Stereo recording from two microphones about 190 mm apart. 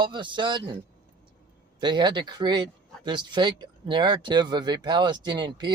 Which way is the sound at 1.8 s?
25° right (ahead or behind).